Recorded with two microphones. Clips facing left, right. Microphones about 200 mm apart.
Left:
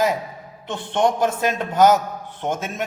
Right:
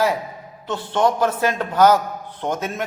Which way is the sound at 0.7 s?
20° left (ahead or behind).